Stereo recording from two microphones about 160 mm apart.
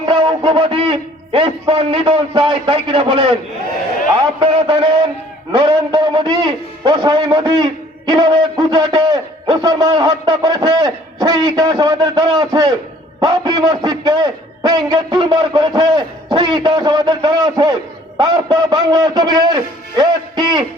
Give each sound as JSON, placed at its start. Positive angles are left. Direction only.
{"t": 0.0, "sound": "a man's voice", "side_deg": -35}
{"t": 4.4, "sound": "a man's voice", "side_deg": -30}